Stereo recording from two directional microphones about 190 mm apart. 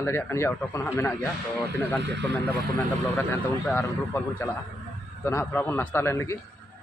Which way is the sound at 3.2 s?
10° left (ahead or behind).